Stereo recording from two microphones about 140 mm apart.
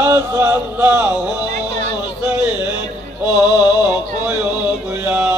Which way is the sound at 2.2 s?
10° right (ahead or behind).